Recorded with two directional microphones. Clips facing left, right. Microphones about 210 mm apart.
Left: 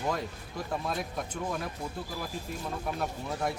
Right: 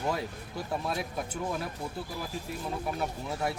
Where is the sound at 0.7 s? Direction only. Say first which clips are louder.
Right 1 dB; 5° right (ahead or behind).